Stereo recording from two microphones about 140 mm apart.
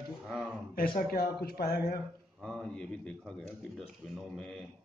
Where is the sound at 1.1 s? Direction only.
90° left.